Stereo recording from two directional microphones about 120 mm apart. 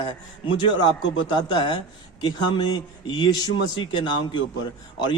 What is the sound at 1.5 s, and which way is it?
A man's voice, 40° left (ahead or behind).